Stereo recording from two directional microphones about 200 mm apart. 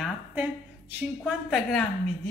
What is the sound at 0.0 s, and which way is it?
A woman's voice, 10° right (ahead or behind).